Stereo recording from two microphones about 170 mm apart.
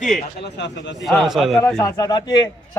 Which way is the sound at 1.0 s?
Centre (ahead or behind).